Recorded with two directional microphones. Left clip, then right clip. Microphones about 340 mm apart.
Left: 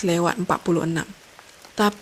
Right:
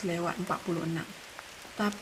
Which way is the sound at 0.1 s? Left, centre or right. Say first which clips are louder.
Left 11 dB; left.